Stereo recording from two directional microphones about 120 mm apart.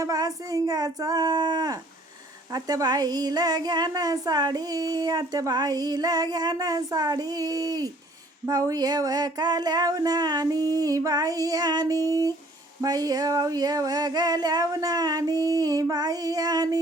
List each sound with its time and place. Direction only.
0.0 s speech: 30° right (ahead or behind)